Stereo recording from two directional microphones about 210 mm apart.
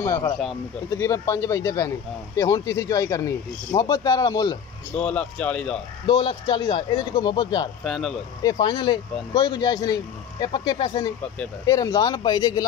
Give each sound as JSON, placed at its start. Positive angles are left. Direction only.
{"t": 0.0, "sound": "speech", "side_deg": 15}
{"t": 5.0, "sound": "speech", "side_deg": 5}
{"t": 6.0, "sound": "speech", "side_deg": 25}
{"t": 7.8, "sound": "speech", "side_deg": 0}
{"t": 8.4, "sound": "speech", "side_deg": 20}